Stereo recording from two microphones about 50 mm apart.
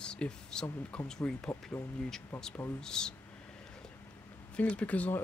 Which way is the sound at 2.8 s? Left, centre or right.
Centre.